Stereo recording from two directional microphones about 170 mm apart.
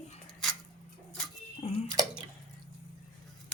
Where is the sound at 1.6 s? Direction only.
35° left (ahead or behind).